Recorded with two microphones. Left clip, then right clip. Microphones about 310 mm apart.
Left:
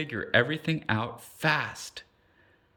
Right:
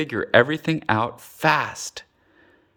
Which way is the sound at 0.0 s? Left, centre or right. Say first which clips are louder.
Right 8 dB; centre.